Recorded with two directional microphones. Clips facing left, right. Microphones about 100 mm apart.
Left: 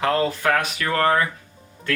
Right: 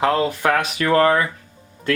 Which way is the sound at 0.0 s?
20° right (ahead or behind).